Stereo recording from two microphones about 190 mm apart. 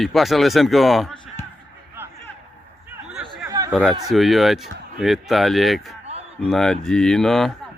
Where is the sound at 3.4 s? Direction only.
20° right (ahead or behind).